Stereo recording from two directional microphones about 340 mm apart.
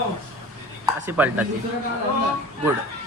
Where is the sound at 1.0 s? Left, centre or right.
Centre.